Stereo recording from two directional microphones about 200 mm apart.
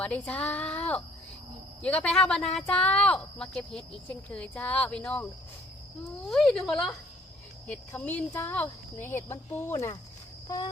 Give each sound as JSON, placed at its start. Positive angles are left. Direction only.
{"t": 0.0, "sound": "speech", "side_deg": 5}
{"t": 6.3, "sound": "speech", "side_deg": 0}